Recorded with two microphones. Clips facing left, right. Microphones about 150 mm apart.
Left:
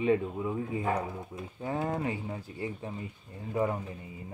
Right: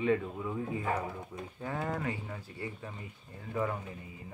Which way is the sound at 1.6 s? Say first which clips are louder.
Left 4 dB; 20° left (ahead or behind).